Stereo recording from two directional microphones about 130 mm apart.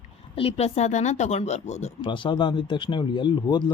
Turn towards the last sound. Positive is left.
turn(degrees=35)  # may be behind; listen again after turning